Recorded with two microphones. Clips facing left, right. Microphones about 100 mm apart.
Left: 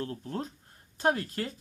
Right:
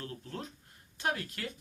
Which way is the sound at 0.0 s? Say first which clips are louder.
Left 7 dB; 35° left (ahead or behind).